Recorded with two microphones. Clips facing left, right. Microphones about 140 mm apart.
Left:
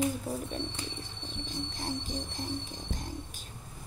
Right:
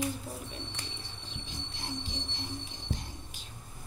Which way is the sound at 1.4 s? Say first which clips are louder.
Left 7 dB; 45° left (ahead or behind).